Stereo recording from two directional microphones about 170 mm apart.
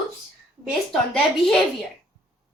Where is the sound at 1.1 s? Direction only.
Centre (ahead or behind).